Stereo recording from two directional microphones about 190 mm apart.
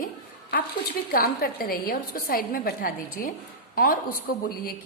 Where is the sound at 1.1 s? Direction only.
50° left (ahead or behind).